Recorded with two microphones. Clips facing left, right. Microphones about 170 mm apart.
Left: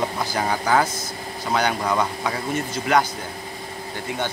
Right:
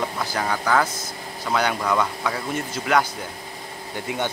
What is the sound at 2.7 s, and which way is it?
Speech, centre (ahead or behind).